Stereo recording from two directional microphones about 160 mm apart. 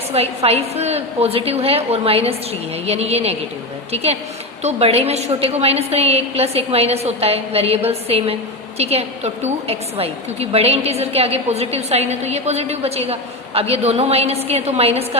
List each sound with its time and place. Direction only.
0.1 s a woman's voice: 40° right (ahead or behind)